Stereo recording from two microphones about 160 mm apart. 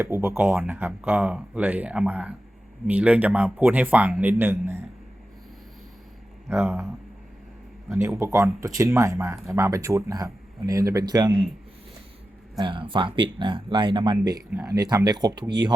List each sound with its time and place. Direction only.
0.0 s a man's voice: 15° right (ahead or behind)
6.5 s speech: centre (ahead or behind)
8.2 s speech: 20° right (ahead or behind)
12.5 s speech: 30° right (ahead or behind)